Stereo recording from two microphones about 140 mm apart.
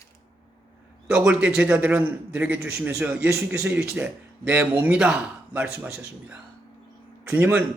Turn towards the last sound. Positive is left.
turn(degrees=-10)  # may be behind; listen again after turning